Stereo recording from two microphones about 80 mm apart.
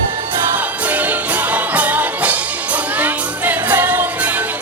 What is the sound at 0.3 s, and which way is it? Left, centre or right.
Music, right.